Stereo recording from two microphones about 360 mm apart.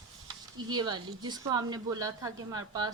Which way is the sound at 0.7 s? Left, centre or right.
Centre.